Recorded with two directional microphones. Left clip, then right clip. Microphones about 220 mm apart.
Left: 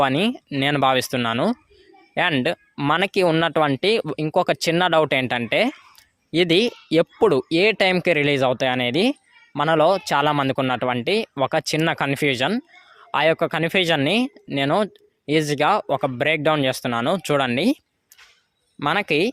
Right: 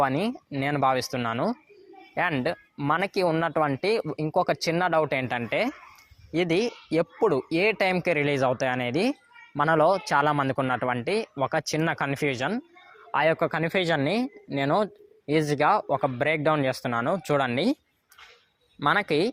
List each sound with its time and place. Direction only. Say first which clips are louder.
0.0 s speech: left 5 dB; 55° left (ahead or behind)
0.3 s speech: left 6 dB; 40° left (ahead or behind)
4.5 s speech: left 6 dB; 60° left (ahead or behind); by 7.0 s 40° left (ahead or behind)
7.0 s speech: left 6 dB; 55° left (ahead or behind)
8.0 s speech: left 5 dB; 45° left (ahead or behind)
18.8 s speech: left 3 dB; 30° left (ahead or behind)